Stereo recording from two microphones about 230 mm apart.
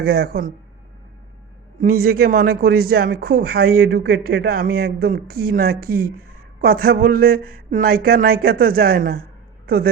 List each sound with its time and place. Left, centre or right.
0.0 s speech: right
1.8 s a woman's voice: right